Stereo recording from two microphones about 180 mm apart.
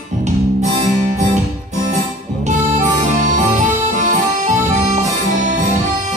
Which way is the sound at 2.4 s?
45° right (ahead or behind).